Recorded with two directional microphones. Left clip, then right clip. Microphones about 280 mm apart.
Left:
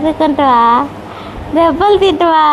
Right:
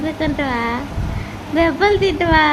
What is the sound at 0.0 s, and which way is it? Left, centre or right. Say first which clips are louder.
A woman's voice: left 10 dB; centre.